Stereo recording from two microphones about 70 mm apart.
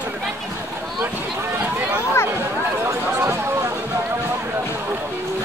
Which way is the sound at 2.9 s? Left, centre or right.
Right.